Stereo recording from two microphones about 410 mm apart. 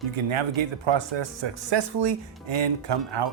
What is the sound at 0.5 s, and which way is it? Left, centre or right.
Speech, right.